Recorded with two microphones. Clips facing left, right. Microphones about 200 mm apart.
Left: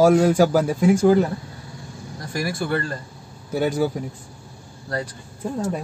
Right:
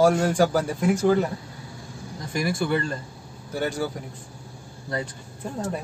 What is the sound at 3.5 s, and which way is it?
Speech, 10° left (ahead or behind).